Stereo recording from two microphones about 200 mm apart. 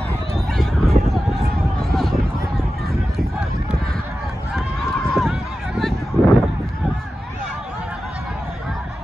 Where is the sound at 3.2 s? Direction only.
5° right (ahead or behind).